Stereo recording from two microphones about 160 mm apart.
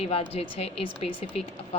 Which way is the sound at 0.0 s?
40° left (ahead or behind).